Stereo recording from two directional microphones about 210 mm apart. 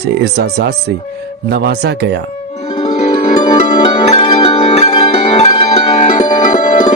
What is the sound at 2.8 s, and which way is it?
Music, 30° left (ahead or behind).